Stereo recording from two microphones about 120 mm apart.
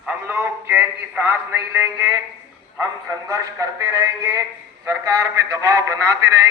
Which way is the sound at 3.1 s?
30° right (ahead or behind).